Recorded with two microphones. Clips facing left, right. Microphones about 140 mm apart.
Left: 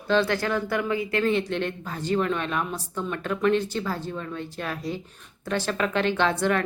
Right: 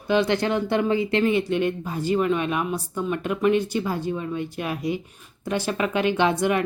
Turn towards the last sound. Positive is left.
turn(degrees=-15)  # may be behind; listen again after turning